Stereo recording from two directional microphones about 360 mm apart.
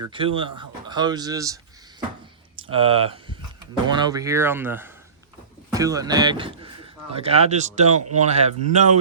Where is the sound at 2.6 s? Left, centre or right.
Centre.